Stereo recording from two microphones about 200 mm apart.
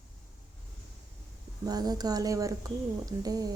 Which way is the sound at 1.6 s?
20° right (ahead or behind).